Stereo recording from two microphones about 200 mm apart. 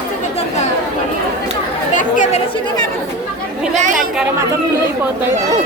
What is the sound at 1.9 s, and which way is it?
Speech, 40° left (ahead or behind).